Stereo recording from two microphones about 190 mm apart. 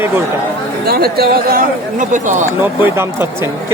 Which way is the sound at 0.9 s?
55° right (ahead or behind).